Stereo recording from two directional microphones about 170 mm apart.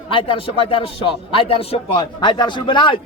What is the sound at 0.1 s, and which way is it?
A man's voice, 30° left (ahead or behind).